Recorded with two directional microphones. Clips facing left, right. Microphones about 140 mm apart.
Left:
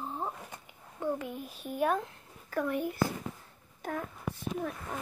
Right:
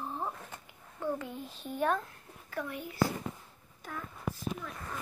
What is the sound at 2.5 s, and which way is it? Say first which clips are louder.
Speech: left 7 dB; 50° left (ahead or behind).